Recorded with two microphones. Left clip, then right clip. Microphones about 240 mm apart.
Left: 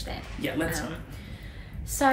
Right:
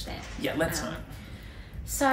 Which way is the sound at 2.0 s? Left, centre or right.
Centre.